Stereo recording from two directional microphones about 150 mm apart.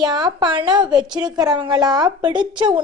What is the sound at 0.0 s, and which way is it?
A woman's voice, 30° right (ahead or behind).